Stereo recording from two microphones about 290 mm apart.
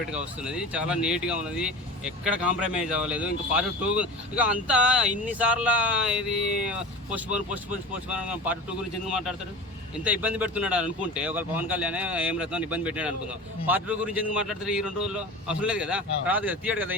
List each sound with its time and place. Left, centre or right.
0.5 s speech: centre
9.0 s speech: centre